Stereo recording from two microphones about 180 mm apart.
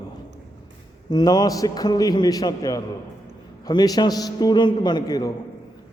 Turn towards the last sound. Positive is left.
turn(degrees=20)  # may be behind; listen again after turning